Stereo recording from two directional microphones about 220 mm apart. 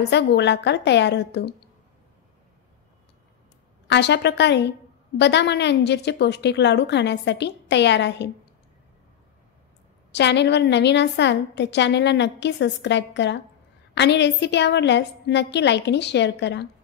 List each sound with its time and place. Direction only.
0.1 s a woman's voice: 50° left (ahead or behind)
3.8 s a woman's voice: 50° left (ahead or behind)
10.1 s a woman's voice: 50° left (ahead or behind)